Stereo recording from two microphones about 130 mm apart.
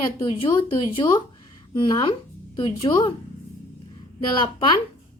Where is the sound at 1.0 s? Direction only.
35° left (ahead or behind).